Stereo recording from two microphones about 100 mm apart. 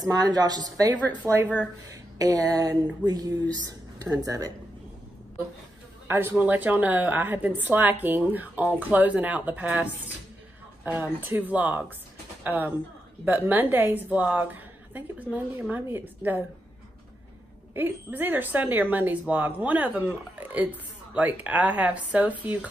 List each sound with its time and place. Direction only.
0.0 s speech: 40° right (ahead or behind)
1.2 s a woman's voice: 20° right (ahead or behind)
1.9 s speech: 35° right (ahead or behind)
6.0 s a man's voice: 25° right (ahead or behind)
17.7 s speech: 20° right (ahead or behind)